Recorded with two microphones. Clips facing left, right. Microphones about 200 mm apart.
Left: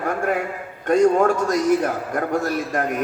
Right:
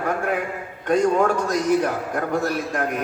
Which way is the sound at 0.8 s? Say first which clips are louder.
Left 3 dB; 45° left (ahead or behind).